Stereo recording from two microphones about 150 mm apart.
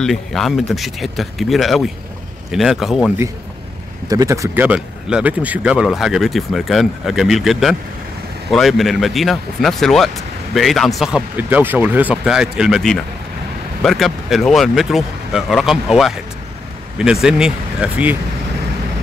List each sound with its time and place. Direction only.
0.0 s speech: centre (ahead or behind)
4.1 s speech: 20° right (ahead or behind)
4.6 s speech: 5° right (ahead or behind)